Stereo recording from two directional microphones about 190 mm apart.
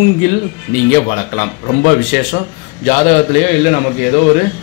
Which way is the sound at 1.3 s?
45° left (ahead or behind).